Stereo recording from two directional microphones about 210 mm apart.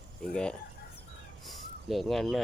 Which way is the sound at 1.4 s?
Centre (ahead or behind).